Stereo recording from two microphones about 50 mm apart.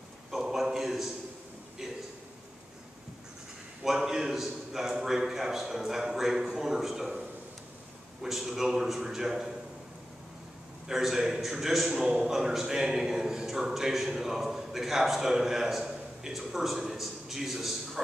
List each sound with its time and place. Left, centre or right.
0.4 s a sound: centre
3.8 s a man's voice: centre
10.9 s a man's voice: centre
11.9 s a man's voice: centre